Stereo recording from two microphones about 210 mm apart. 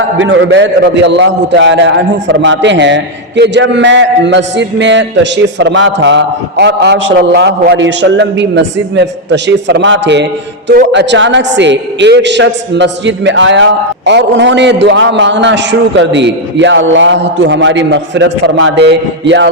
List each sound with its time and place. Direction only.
0.2 s a man's voice: 60° right (ahead or behind)